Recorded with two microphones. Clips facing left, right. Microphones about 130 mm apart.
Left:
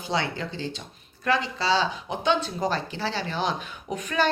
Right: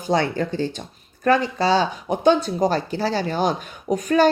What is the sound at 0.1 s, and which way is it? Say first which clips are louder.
Speech: right 8 dB; 45° right (ahead or behind).